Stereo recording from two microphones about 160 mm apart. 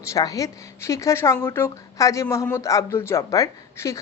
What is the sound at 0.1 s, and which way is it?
Speech, 20° left (ahead or behind).